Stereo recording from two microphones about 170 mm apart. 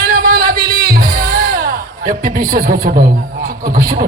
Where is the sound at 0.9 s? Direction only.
60° right (ahead or behind).